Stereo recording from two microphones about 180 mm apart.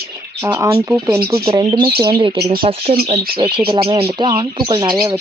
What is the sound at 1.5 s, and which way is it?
Speech, 30° right (ahead or behind).